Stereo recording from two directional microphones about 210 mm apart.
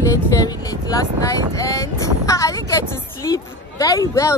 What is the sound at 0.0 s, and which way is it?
Speech, 15° left (ahead or behind).